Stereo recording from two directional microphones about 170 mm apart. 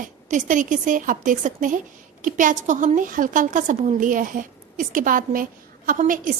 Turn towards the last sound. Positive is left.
turn(degrees=-50)  # may be behind; listen again after turning